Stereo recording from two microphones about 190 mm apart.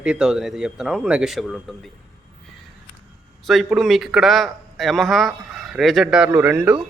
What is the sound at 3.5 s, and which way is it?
Speech, centre (ahead or behind).